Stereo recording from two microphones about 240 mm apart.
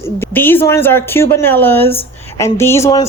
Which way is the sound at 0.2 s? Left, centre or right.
Centre.